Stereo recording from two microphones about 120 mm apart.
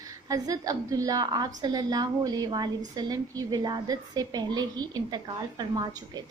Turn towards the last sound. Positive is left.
turn(degrees=-35)  # may be behind; listen again after turning